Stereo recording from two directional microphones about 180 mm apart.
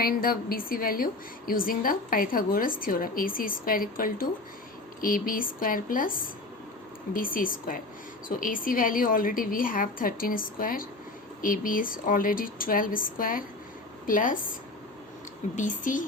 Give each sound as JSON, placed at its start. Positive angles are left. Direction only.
{"t": 0.0, "sound": "a woman's voice", "side_deg": 55}
{"t": 15.5, "sound": "a woman's voice", "side_deg": 45}